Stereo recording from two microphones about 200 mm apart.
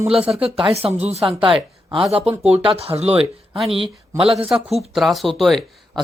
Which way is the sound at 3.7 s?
25° right (ahead or behind).